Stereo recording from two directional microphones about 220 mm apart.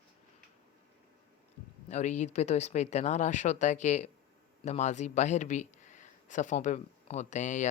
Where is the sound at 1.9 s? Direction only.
35° left (ahead or behind).